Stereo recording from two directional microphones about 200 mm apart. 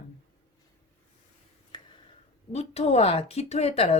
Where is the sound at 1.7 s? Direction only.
20° left (ahead or behind).